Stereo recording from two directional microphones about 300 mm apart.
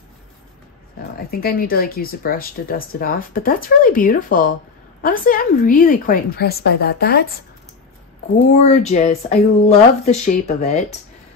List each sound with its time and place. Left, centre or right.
1.3 s speech: left
8.5 s speech: left